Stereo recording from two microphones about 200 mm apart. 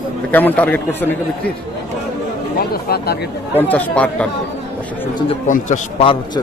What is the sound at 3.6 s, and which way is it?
Speech, 10° left (ahead or behind).